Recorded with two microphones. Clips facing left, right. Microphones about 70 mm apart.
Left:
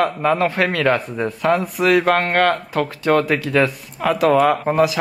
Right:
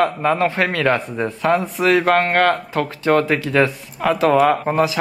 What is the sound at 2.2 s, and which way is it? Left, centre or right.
Speech, right.